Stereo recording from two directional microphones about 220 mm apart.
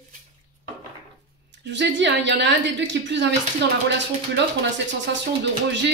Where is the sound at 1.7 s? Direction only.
55° right (ahead or behind).